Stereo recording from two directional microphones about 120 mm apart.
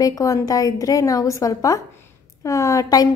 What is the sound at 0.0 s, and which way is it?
A woman's voice, 30° left (ahead or behind).